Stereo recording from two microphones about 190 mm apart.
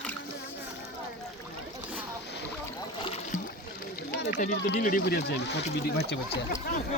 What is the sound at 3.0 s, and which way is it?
Boat, 25° left (ahead or behind).